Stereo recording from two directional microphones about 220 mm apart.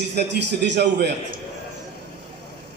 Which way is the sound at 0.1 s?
50° right (ahead or behind).